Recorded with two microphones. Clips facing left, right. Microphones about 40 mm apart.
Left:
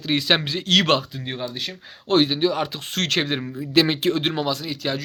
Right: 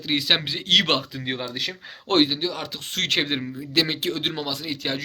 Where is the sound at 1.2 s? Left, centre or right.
Right.